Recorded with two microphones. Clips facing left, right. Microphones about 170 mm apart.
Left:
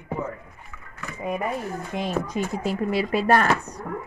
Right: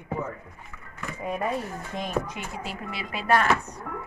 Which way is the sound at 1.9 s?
35° left (ahead or behind).